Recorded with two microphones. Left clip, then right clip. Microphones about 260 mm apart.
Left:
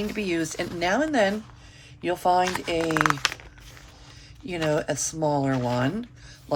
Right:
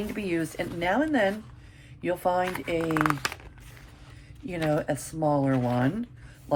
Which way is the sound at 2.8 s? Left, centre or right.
Left.